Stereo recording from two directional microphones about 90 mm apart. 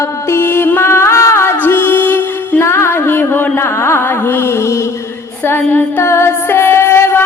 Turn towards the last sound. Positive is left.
turn(degrees=25)  # may be behind; listen again after turning